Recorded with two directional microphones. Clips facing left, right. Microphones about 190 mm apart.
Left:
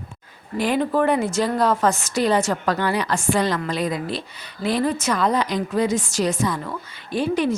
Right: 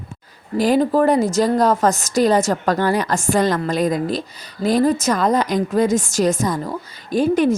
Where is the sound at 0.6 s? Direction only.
40° right (ahead or behind).